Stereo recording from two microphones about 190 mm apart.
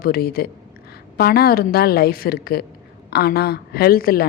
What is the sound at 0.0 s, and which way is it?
A woman's voice, 50° left (ahead or behind).